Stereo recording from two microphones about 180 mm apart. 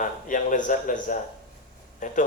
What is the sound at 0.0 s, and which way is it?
Speech, 45° left (ahead or behind).